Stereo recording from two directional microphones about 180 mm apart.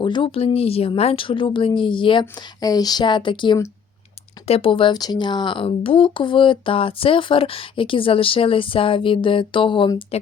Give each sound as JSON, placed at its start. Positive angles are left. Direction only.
{"t": 0.0, "sound": "speech", "side_deg": 25}